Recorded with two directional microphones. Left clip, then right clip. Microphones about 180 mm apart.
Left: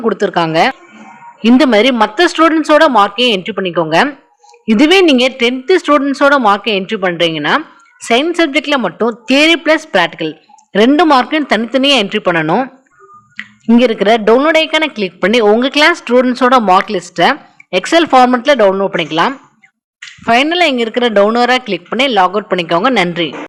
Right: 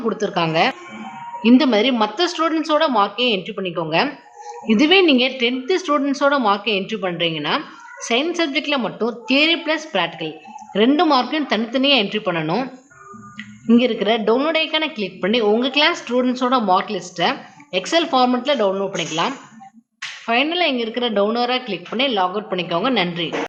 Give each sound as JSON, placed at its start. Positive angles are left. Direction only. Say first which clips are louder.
{"t": 0.0, "sound": "speech", "louder": "left 7 dB", "side_deg": 40}
{"t": 13.7, "sound": "speech", "louder": "left 7 dB", "side_deg": 40}